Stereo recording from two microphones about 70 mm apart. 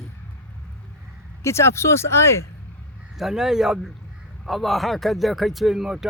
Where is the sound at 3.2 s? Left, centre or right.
Centre.